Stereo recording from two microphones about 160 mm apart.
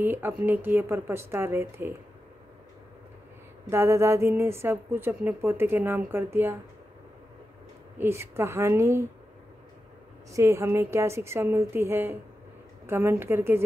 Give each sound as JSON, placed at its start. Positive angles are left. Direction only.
{"t": 0.0, "sound": "a woman's voice", "side_deg": -15}
{"t": 3.7, "sound": "a woman's voice", "side_deg": -15}
{"t": 8.0, "sound": "a woman's voice", "side_deg": -15}
{"t": 10.3, "sound": "a woman's voice", "side_deg": -20}